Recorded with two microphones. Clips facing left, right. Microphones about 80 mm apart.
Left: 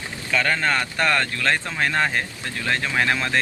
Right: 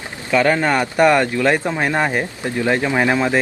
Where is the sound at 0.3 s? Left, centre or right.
Right.